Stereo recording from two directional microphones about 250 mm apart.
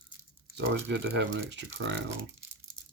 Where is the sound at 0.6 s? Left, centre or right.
Right.